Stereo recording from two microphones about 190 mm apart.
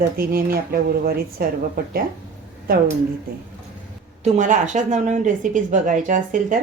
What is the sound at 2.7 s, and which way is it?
Speech, 50° right (ahead or behind).